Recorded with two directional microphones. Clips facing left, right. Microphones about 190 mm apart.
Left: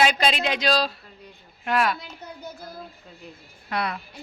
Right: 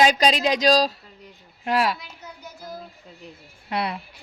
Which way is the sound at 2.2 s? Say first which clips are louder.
Left 3 dB; 55° left (ahead or behind).